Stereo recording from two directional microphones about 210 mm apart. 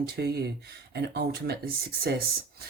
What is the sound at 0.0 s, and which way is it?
Speech, 50° right (ahead or behind).